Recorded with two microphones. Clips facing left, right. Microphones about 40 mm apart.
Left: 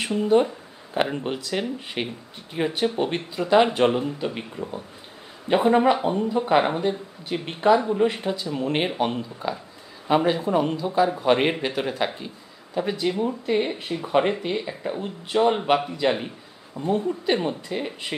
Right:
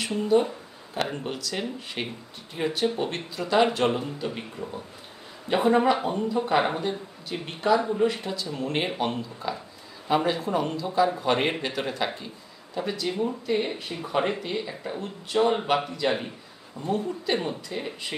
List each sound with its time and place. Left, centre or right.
0.3 s speech: left
1.0 s speech: centre
7.3 s speech: left
13.7 s speech: left
14.4 s speech: centre